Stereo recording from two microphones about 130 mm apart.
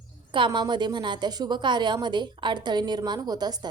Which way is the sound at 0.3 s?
40° right (ahead or behind).